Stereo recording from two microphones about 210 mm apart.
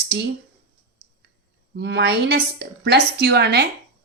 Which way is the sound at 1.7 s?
55° right (ahead or behind).